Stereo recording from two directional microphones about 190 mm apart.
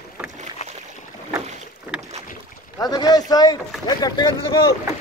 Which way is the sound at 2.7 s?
20° left (ahead or behind).